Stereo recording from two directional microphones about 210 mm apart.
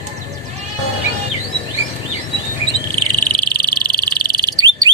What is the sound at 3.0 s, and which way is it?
Frog, 20° right (ahead or behind).